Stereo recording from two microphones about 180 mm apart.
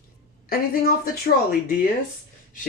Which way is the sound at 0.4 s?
55° left (ahead or behind).